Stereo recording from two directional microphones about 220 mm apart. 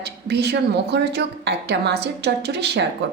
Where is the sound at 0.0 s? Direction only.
50° right (ahead or behind).